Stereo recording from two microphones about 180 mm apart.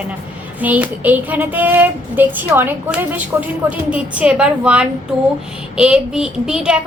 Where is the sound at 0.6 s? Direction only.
10° right (ahead or behind).